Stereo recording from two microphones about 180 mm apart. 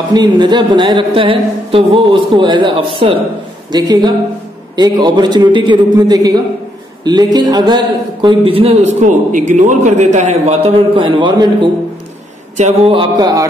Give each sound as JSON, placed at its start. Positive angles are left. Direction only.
{"t": 0.1, "sound": "a woman's voice", "side_deg": -25}
{"t": 12.5, "sound": "speech", "side_deg": -35}
{"t": 13.2, "sound": "a woman's voice", "side_deg": -20}